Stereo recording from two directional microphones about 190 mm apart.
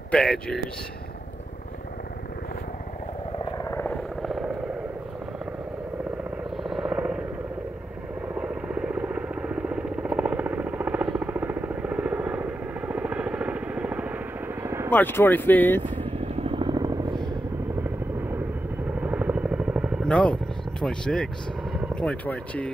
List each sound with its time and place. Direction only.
0.1 s speech: 5° left (ahead or behind)
3.5 s helicopter: 15° left (ahead or behind); by 4.5 s centre (ahead or behind)
6.5 s helicopter: centre (ahead or behind)
8.4 s vehicle: 5° right (ahead or behind)
14.9 s speech: 10° left (ahead or behind)
16.0 s vehicle: 30° right (ahead or behind)
18.9 s vehicle: 5° right (ahead or behind)
20.1 s vehicle: 5° left (ahead or behind)
20.8 s speech: 5° left (ahead or behind)